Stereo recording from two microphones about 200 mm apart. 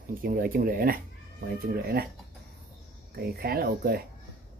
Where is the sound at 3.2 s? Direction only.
50° right (ahead or behind).